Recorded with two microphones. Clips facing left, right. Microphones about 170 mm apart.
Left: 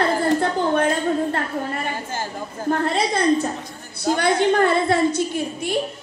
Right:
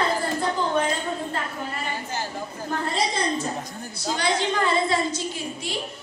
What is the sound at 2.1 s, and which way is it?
Chatter, 50° left (ahead or behind).